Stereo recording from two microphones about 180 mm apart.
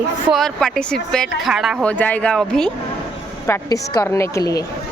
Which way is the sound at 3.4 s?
15° left (ahead or behind).